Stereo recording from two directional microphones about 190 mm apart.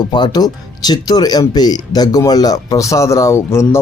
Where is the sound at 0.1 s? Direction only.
20° left (ahead or behind).